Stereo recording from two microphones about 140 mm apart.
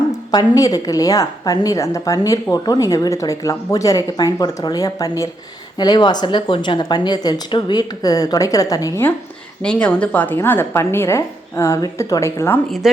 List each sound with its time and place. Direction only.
0.3 s a woman's voice: 25° left (ahead or behind)
9.6 s a woman's voice: 10° left (ahead or behind)
12.8 s speech: 5° right (ahead or behind)